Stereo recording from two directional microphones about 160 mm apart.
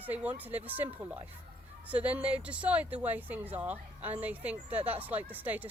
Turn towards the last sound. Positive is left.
turn(degrees=-10)  # may be behind; listen again after turning